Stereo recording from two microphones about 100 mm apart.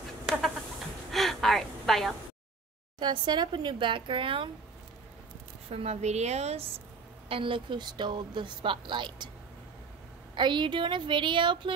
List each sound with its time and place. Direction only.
1.1 s a sound: centre (ahead or behind)
3.0 s speech: 50° right (ahead or behind)
5.7 s a woman's voice: 90° right
7.2 s speech: 65° right (ahead or behind)
10.3 s speech: 50° right (ahead or behind)